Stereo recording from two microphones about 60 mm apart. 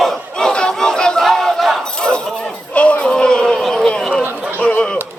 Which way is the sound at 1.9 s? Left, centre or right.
Centre.